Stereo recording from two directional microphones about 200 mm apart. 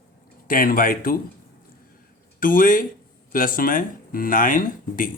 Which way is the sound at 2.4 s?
45° left (ahead or behind).